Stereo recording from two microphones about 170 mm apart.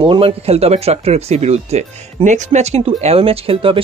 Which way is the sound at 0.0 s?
30° right (ahead or behind).